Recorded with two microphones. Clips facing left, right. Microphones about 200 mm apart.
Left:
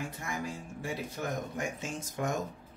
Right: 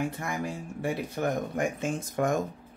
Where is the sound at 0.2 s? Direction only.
60° right (ahead or behind).